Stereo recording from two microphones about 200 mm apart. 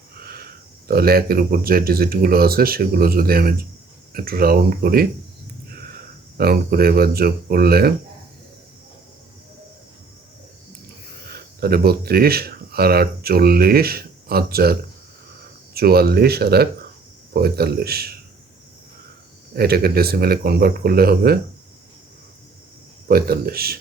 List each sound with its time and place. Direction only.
0.2 s a sound: 50° right (ahead or behind)
0.9 s speech: 50° right (ahead or behind)
6.3 s speech: 50° right (ahead or behind)
11.3 s speech: 50° right (ahead or behind)
19.5 s speech: 50° right (ahead or behind)
23.0 s speech: 50° right (ahead or behind)